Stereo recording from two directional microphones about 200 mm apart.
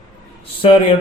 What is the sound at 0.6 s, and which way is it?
Speech, 25° left (ahead or behind).